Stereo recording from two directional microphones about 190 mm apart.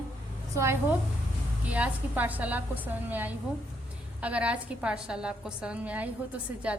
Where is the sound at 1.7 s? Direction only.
10° right (ahead or behind).